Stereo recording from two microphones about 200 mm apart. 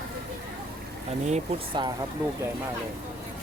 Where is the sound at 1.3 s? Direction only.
25° right (ahead or behind).